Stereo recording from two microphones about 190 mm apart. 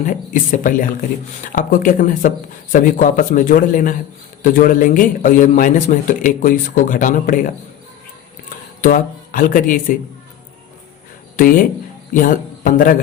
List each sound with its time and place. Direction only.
0.0 s a man's voice: 45° left (ahead or behind)
8.8 s speech: 45° left (ahead or behind)
11.3 s a man's voice: 45° left (ahead or behind)